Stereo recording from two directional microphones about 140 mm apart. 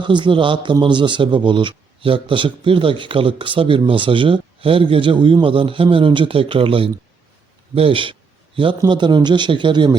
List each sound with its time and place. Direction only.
0.0 s a man's voice: 35° right (ahead or behind)